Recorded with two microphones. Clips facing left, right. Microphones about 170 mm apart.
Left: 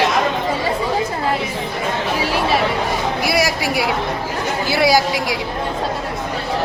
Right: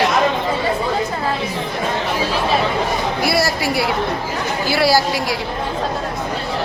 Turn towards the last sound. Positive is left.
turn(degrees=15)  # may be behind; listen again after turning